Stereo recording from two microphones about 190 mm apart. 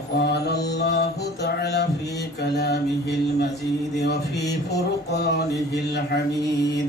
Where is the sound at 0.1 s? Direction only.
60° left (ahead or behind).